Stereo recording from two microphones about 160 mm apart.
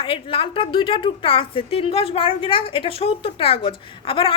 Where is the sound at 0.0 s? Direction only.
35° left (ahead or behind).